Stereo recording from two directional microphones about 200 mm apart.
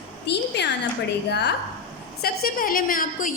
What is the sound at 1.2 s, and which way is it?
A woman's voice, 55° left (ahead or behind).